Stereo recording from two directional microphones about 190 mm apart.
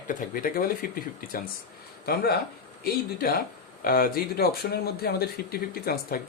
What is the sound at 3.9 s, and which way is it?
Speech, 50° left (ahead or behind).